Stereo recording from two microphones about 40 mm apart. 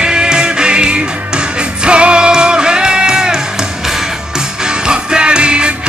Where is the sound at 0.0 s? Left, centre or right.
Right.